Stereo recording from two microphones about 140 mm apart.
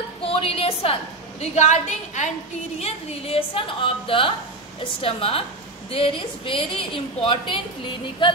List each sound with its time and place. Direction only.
0.2 s a sound: 40° left (ahead or behind)
1.4 s a woman's voice: 55° left (ahead or behind)
2.8 s a woman's voice: 45° left (ahead or behind)